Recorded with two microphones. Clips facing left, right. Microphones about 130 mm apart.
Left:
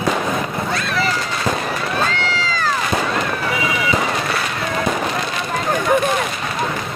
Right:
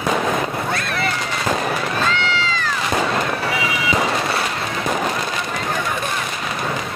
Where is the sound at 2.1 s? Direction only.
40° left (ahead or behind).